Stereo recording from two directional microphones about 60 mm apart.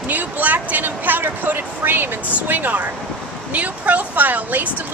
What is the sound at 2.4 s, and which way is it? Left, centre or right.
A woman's voice, right.